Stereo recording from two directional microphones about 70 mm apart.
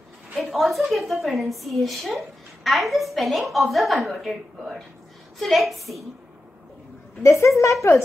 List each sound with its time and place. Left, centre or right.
0.3 s a woman's voice: centre
7.2 s a woman's voice: left